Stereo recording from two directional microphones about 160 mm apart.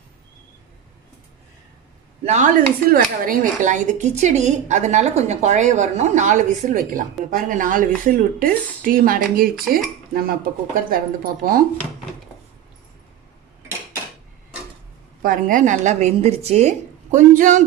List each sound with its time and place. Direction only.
2.2 s speech: 50° right (ahead or behind); by 11.6 s 65° right (ahead or behind)
15.2 s speech: 60° right (ahead or behind)